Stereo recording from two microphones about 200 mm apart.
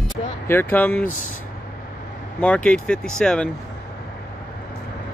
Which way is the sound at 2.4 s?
5° left (ahead or behind).